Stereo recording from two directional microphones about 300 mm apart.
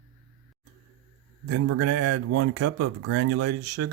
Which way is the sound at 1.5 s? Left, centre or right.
Right.